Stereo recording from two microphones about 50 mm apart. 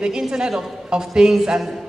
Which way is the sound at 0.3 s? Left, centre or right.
Centre.